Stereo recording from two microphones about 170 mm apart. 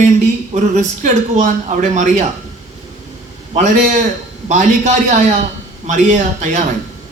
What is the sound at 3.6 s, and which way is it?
Speech, 50° right (ahead or behind).